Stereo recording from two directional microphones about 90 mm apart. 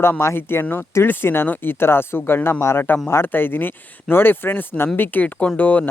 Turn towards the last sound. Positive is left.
turn(degrees=15)  # may be behind; listen again after turning